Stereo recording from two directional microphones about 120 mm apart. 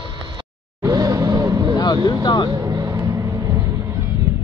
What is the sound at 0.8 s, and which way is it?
Vehicle, 30° right (ahead or behind).